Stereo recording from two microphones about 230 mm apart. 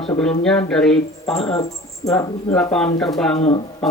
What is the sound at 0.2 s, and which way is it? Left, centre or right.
Speech, centre.